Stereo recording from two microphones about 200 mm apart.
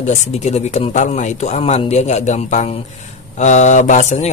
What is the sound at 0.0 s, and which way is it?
Speech, 35° left (ahead or behind).